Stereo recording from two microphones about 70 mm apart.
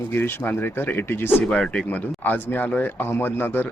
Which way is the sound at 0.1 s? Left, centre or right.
Left.